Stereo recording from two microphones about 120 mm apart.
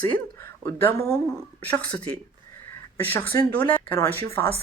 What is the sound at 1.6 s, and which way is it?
Speech, 15° left (ahead or behind).